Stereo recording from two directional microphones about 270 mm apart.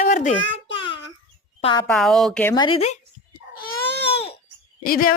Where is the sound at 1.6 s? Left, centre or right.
Centre.